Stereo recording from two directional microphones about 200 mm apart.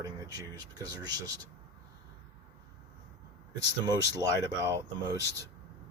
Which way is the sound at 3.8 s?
20° right (ahead or behind).